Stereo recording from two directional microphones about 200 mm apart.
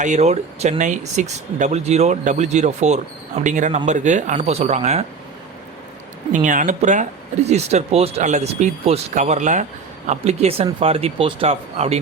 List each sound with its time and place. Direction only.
0.0 s speech: 35° right (ahead or behind)
6.3 s speech: 40° right (ahead or behind)